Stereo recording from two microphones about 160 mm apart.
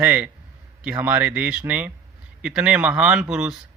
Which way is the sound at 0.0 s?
10° right (ahead or behind).